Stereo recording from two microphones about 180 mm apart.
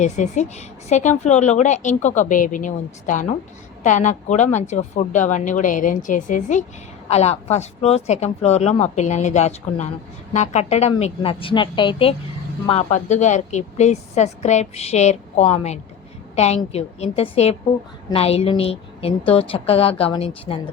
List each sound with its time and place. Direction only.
0.0 s a woman's voice: 40° left (ahead or behind)